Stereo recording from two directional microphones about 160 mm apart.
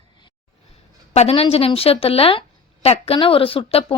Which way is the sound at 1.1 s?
40° left (ahead or behind).